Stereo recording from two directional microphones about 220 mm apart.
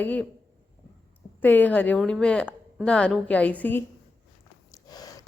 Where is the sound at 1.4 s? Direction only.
10° left (ahead or behind).